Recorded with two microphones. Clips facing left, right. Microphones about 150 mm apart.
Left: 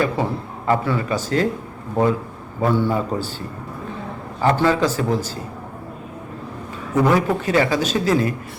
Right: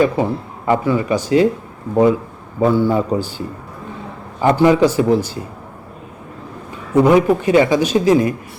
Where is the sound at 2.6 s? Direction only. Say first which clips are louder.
Right 5 dB; 15° right (ahead or behind).